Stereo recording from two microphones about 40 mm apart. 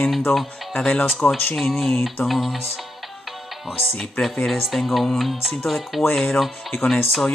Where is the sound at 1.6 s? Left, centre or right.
Centre.